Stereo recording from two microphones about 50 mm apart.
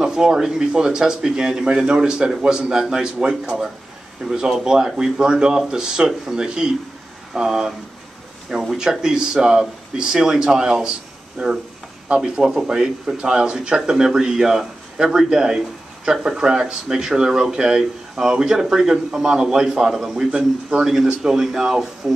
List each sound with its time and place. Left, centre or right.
0.0 s a man's voice: centre
12.2 s speech: centre
20.2 s a man's voice: right
20.8 s speech: centre